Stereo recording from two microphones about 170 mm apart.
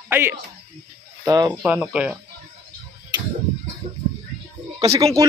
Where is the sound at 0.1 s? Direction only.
15° right (ahead or behind).